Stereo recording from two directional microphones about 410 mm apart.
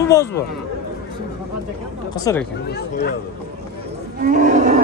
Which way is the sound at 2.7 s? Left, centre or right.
Left.